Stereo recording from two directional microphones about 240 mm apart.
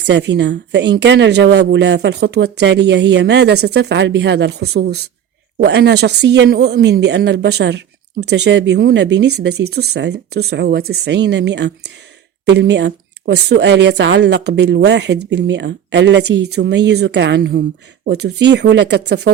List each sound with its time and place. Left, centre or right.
0.0 s speech: right